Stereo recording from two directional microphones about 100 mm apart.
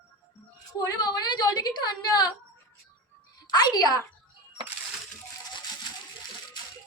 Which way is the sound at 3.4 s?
45° left (ahead or behind).